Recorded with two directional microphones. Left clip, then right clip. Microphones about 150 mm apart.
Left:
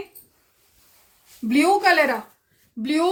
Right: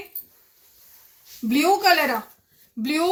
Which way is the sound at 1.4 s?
40° left (ahead or behind).